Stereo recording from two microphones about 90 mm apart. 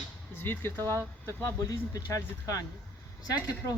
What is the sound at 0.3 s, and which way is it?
Speech, 20° left (ahead or behind).